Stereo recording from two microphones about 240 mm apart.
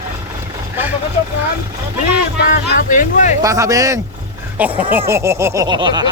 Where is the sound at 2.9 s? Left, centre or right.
Left.